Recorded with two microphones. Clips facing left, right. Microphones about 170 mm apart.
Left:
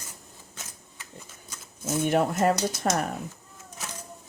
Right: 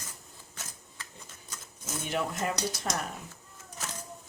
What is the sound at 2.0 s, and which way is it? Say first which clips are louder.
Speech: left 9 dB; 50° left (ahead or behind).